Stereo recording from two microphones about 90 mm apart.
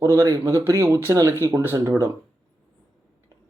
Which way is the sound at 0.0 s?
35° right (ahead or behind).